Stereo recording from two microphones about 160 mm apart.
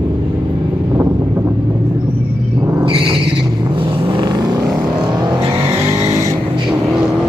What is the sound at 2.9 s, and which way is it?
Vehicle, 35° right (ahead or behind).